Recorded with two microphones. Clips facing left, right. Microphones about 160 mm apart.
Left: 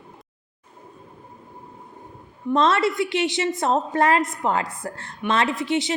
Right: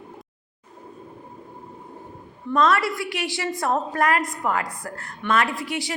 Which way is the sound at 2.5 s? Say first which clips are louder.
Left 1 dB; 25° left (ahead or behind).